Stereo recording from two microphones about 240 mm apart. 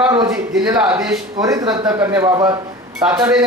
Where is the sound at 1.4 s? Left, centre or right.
Centre.